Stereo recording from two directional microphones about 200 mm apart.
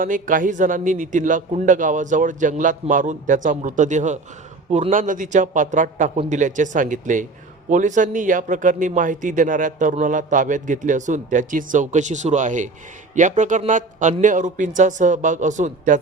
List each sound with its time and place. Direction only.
0.0 s a man's voice: 40° right (ahead or behind)